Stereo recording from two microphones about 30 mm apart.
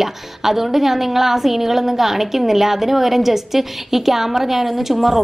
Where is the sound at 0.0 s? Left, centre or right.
Centre.